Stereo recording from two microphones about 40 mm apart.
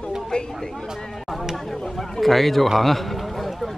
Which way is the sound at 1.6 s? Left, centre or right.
Centre.